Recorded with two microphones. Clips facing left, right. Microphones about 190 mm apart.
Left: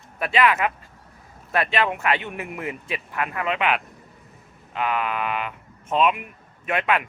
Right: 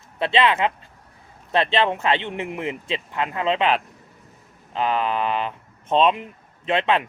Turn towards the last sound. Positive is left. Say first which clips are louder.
# right 3 dB
turn(degrees=-25)  # may be behind; listen again after turning